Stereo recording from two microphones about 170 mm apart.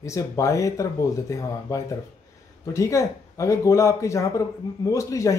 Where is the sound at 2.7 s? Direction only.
20° left (ahead or behind).